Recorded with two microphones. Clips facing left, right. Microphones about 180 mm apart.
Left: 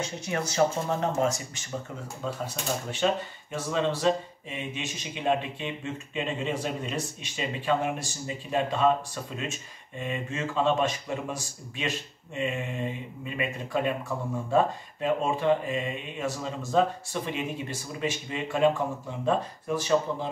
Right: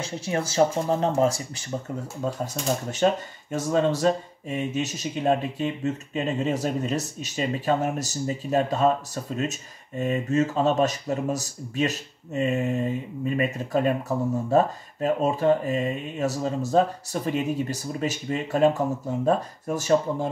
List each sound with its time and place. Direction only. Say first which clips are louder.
0.0 s speech: right 3 dB; 30° right (ahead or behind)
2.2 s speech: right 5 dB; 45° right (ahead or behind)